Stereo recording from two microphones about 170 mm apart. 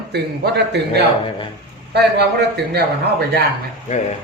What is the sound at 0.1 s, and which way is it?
A man's voice, 80° right.